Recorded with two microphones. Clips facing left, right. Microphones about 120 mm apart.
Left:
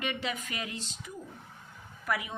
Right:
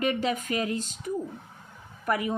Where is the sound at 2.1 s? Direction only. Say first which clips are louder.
Right 6 dB; 40° right (ahead or behind).